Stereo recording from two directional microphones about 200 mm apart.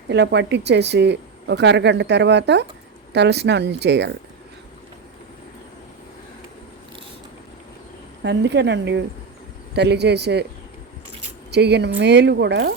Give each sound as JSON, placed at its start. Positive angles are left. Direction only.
{"t": 0.1, "sound": "speech", "side_deg": -60}
{"t": 8.2, "sound": "speech", "side_deg": -60}
{"t": 11.5, "sound": "speech", "side_deg": -55}